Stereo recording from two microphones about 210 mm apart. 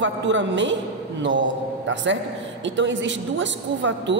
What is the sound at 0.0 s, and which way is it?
Speech, 60° right (ahead or behind).